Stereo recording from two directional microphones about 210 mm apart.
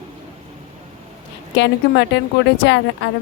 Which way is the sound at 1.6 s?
55° left (ahead or behind).